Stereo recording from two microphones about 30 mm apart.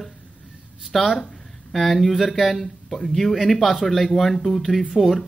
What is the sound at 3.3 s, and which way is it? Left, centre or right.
Speech, centre.